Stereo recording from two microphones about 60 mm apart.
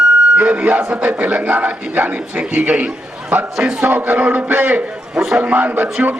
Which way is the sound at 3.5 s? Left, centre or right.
Centre.